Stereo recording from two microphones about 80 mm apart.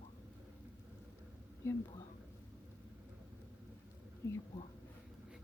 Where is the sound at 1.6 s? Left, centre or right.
Left.